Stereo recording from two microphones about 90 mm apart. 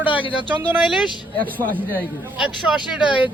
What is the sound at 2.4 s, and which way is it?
Speech, 10° right (ahead or behind).